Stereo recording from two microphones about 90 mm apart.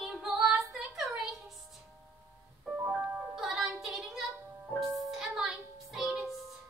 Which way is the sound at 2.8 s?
20° right (ahead or behind).